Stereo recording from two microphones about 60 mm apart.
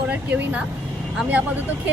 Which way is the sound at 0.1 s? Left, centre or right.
Right.